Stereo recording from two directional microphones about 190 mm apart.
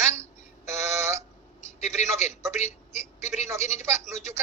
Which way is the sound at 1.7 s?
35° left (ahead or behind).